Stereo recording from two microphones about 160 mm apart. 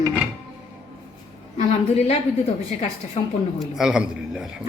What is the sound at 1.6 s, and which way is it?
A woman's voice, 40° left (ahead or behind).